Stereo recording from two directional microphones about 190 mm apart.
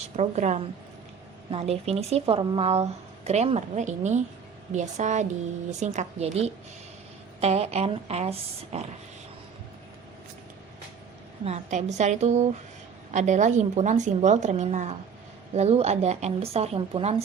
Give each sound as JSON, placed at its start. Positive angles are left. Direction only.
{"t": 0.2, "sound": "speech", "side_deg": -35}
{"t": 11.4, "sound": "speech", "side_deg": -35}